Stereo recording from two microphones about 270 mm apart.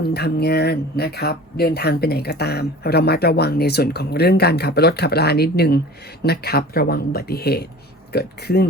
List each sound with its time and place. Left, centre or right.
0.0 s speech: left